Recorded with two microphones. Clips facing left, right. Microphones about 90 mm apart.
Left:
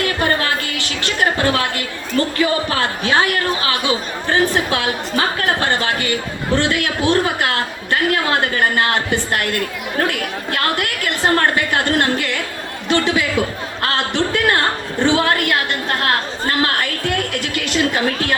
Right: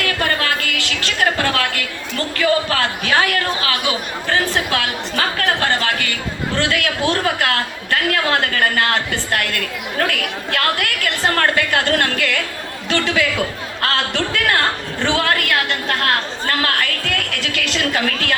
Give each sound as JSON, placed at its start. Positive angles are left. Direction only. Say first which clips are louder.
{"t": 0.0, "sound": "a woman's voice", "louder": "left 2 dB", "side_deg": 30}